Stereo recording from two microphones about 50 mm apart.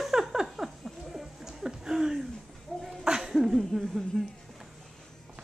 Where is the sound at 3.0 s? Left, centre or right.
Centre.